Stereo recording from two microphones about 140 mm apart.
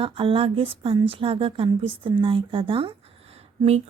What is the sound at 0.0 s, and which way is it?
A woman's voice, 40° right (ahead or behind).